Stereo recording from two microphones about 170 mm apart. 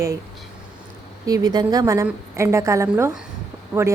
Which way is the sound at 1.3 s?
20° right (ahead or behind).